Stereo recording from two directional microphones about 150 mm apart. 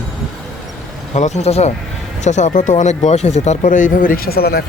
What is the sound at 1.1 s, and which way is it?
Speech, 50° left (ahead or behind).